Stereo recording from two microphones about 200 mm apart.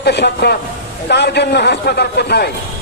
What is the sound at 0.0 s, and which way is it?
A man's voice, 55° left (ahead or behind).